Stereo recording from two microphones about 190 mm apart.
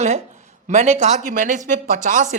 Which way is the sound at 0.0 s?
35° right (ahead or behind).